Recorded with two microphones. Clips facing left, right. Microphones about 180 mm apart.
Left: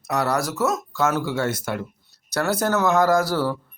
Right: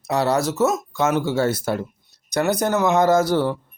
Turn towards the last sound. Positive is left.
turn(degrees=-20)  # may be behind; listen again after turning